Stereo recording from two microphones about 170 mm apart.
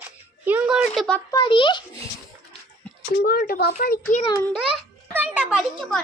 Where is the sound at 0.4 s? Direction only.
10° right (ahead or behind).